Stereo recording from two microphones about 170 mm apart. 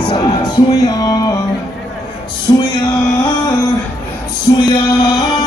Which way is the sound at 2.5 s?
25° left (ahead or behind).